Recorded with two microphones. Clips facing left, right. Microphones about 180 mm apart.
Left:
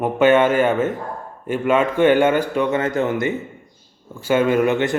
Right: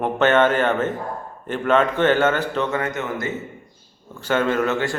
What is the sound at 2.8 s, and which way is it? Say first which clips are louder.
Speech: left 5 dB; 30° left (ahead or behind).